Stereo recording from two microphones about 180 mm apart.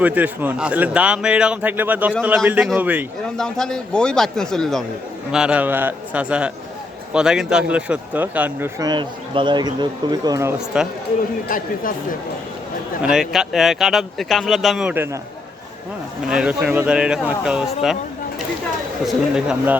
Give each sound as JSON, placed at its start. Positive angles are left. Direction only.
{"t": 0.0, "sound": "a man's voice", "side_deg": -10}
{"t": 3.3, "sound": "a man's voice", "side_deg": 5}
{"t": 8.8, "sound": "speech", "side_deg": -25}
{"t": 10.7, "sound": "speech", "side_deg": -5}
{"t": 11.4, "sound": "speech", "side_deg": 50}
{"t": 13.0, "sound": "speech", "side_deg": -5}
{"t": 16.3, "sound": "speech", "side_deg": -5}
{"t": 19.0, "sound": "speech", "side_deg": -5}